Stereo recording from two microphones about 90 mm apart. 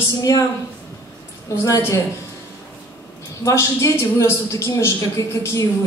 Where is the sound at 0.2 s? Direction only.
40° left (ahead or behind).